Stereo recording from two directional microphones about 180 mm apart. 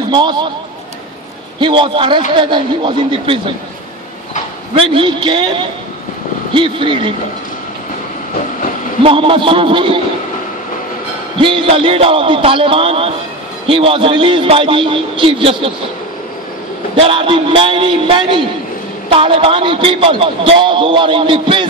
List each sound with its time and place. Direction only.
0.1 s a man's voice: 25° right (ahead or behind)
1.6 s a man's voice: 30° right (ahead or behind)
4.7 s a man's voice: 30° right (ahead or behind)
9.0 s a man's voice: 30° right (ahead or behind)
11.3 s a man's voice: 30° right (ahead or behind)
17.0 s a man's voice: 30° right (ahead or behind)